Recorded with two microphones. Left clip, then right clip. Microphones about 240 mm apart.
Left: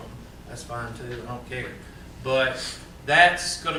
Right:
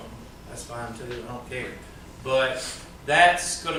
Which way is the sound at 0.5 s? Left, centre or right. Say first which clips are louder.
Left 2 dB; centre.